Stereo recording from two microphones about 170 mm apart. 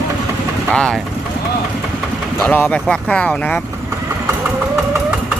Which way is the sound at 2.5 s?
10° left (ahead or behind).